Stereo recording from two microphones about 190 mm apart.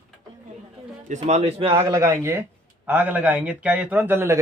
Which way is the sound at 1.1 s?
35° right (ahead or behind).